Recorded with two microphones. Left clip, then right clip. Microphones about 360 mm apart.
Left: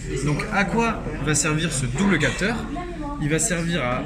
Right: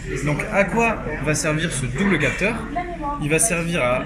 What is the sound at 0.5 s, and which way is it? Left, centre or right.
Speech, centre.